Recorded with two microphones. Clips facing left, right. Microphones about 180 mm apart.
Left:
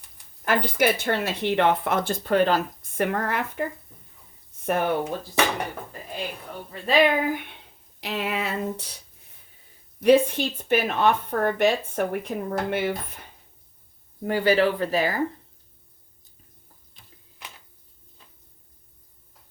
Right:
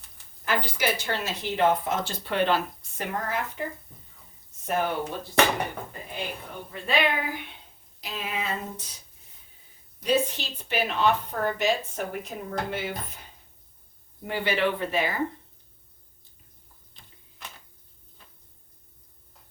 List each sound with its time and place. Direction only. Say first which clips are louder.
0.4 s speech: left 5 dB; 55° left (ahead or behind)
3.0 s speech: left 5 dB; 65° left (ahead or behind)
6.8 s speech: left 6 dB; 55° left (ahead or behind)
8.0 s a sound: left 5 dB; 70° left (ahead or behind)
10.0 s speech: left 8 dB; 60° left (ahead or behind)
14.3 s speech: left 6 dB; 40° left (ahead or behind)